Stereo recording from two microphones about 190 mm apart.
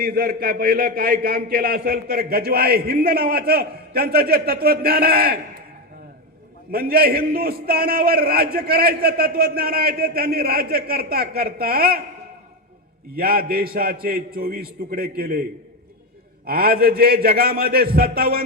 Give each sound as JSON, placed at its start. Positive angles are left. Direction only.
{"t": 0.0, "sound": "a man's voice", "side_deg": -50}
{"t": 6.7, "sound": "a man's voice", "side_deg": -50}
{"t": 13.1, "sound": "a man's voice", "side_deg": -50}
{"t": 16.5, "sound": "a man's voice", "side_deg": -50}